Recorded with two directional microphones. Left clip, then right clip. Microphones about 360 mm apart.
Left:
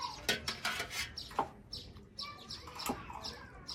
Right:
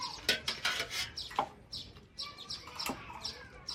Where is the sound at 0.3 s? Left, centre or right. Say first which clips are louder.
Right 4 dB; centre.